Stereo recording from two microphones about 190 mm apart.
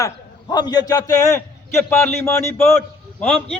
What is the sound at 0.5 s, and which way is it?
A man's voice, 20° left (ahead or behind).